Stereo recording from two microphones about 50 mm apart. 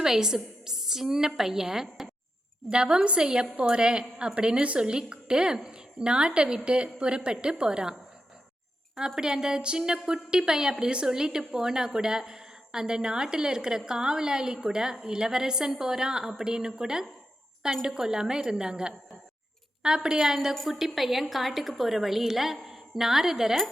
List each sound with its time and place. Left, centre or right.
0.0 s a woman's voice: centre
2.6 s a woman's voice: centre
9.0 s a woman's voice: centre